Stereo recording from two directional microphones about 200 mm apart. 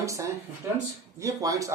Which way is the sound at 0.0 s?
15° right (ahead or behind).